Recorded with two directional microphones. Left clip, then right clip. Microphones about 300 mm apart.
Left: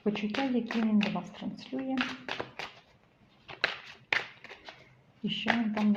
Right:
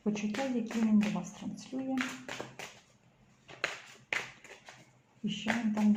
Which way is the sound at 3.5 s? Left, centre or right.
Centre.